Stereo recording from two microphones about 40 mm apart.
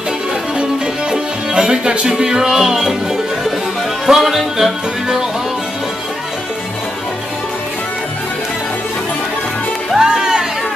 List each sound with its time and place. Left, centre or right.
1.1 s music: centre
4.0 s music: centre
9.9 s music: centre